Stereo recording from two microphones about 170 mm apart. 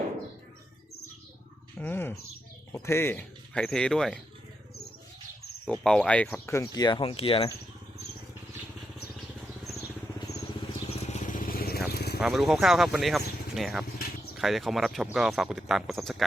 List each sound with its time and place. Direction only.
1.8 s speech: 10° left (ahead or behind)
5.8 s speech: 5° left (ahead or behind); by 7.4 s 35° left (ahead or behind)
10.8 s vehicle: 40° left (ahead or behind); by 12.2 s 70° left (ahead or behind)
12.2 s speech: centre (ahead or behind)